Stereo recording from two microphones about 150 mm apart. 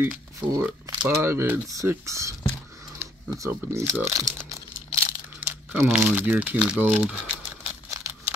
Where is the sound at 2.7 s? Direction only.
25° right (ahead or behind).